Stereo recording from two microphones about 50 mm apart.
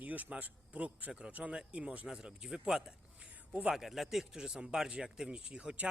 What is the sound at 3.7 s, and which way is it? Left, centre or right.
A man's voice, centre.